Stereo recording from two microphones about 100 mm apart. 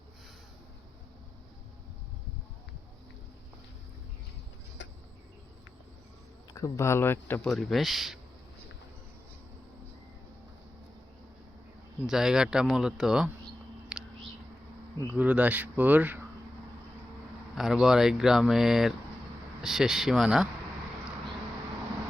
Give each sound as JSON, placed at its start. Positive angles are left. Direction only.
{"t": 6.5, "sound": "speech", "side_deg": 30}
{"t": 7.4, "sound": "speech", "side_deg": 5}
{"t": 12.0, "sound": "speech", "side_deg": -5}
{"t": 13.9, "sound": "a sound", "side_deg": -10}
{"t": 15.1, "sound": "speech", "side_deg": -15}
{"t": 17.5, "sound": "speech", "side_deg": -5}